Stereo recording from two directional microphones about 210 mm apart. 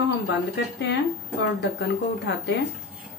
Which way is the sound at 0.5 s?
55° left (ahead or behind).